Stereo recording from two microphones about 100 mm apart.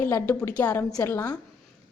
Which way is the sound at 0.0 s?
25° left (ahead or behind).